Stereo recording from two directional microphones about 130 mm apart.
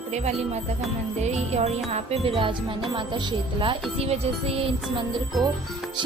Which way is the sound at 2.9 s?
40° right (ahead or behind).